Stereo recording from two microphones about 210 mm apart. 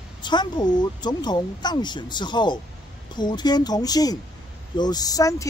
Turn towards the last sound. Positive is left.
turn(degrees=15)  # may be behind; listen again after turning